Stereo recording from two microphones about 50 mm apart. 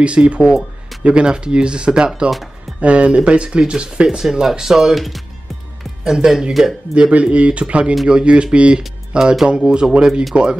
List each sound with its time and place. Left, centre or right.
0.0 s speech: right
6.0 s speech: centre
7.0 s speech: right
9.2 s speech: centre